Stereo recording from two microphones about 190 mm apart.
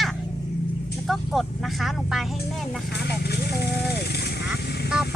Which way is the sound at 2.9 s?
60° left (ahead or behind).